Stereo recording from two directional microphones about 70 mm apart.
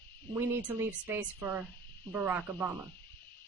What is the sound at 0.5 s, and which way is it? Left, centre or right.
Speech, right.